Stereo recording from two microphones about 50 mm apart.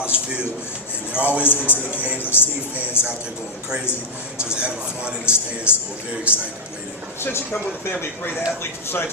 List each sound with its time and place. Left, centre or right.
0.1 s a sound: right
1.2 s a man's voice: right
1.5 s a man's voice: left
2.0 s a sound: right
2.2 s music: left
3.0 s speech: left
4.4 s a man's voice: right
7.2 s speech: left